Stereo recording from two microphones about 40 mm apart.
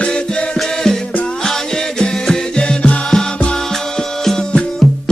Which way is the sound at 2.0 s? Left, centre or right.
Left.